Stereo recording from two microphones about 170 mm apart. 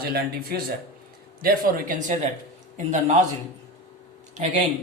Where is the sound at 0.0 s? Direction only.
65° right (ahead or behind); by 3.3 s 45° right (ahead or behind).